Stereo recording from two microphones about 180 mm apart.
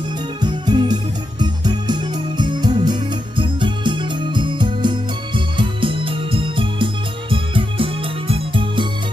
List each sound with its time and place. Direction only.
0.4 s music: 25° right (ahead or behind)